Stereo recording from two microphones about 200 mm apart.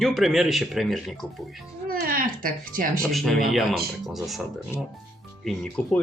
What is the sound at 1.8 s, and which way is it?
Music, 45° right (ahead or behind).